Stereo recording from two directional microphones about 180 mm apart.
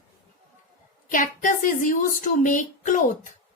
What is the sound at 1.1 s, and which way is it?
Speech, 45° left (ahead or behind).